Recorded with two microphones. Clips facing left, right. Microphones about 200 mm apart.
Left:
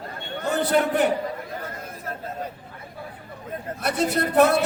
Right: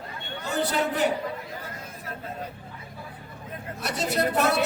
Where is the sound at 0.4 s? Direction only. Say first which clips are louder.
Left 5 dB; 55° left (ahead or behind).